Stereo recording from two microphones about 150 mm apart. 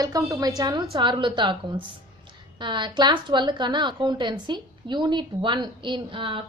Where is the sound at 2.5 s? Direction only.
30° right (ahead or behind).